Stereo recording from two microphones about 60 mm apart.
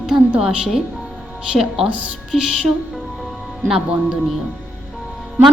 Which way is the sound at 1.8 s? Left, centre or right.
Right.